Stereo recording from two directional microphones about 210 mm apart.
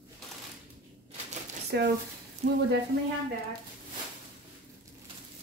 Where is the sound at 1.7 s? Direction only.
55° right (ahead or behind).